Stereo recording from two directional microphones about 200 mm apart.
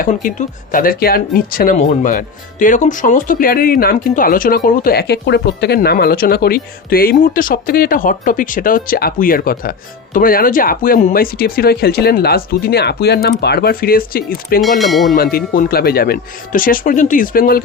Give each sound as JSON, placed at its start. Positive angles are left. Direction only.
{"t": 0.0, "sound": "speech", "side_deg": 40}
{"t": 14.6, "sound": "a sound", "side_deg": 0}
{"t": 15.1, "sound": "speech", "side_deg": 50}